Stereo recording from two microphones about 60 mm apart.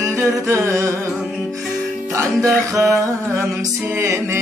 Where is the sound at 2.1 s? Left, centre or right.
Right.